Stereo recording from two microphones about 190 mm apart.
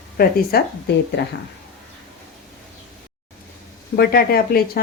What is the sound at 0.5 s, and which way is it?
Speech, 55° left (ahead or behind).